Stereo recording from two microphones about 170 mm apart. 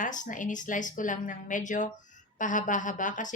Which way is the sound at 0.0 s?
50° left (ahead or behind).